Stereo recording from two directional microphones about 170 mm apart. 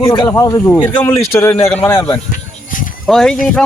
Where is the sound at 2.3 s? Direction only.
50° left (ahead or behind).